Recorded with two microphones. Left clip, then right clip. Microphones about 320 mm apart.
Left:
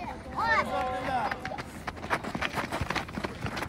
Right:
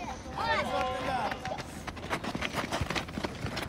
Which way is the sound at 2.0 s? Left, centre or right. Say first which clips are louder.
Left 3 dB; centre.